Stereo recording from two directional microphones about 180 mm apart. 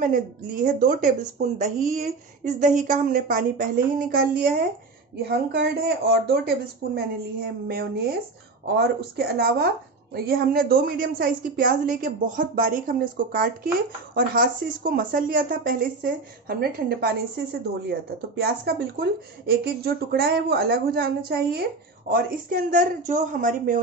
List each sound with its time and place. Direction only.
0.7 s speech: 50° right (ahead or behind)
5.5 s speech: 65° right (ahead or behind); by 23.8 s 45° right (ahead or behind)